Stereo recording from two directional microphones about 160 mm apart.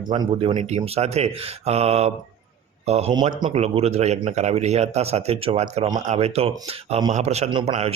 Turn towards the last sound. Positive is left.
turn(degrees=-40)  # may be behind; listen again after turning